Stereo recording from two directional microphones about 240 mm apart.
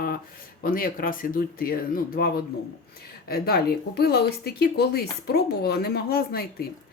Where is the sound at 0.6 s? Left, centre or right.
Left.